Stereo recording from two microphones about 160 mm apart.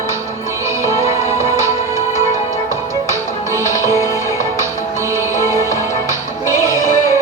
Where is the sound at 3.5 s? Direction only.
20° right (ahead or behind).